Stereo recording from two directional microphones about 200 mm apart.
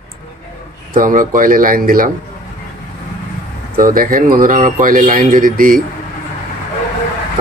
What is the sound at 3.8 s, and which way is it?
Speech, 45° right (ahead or behind).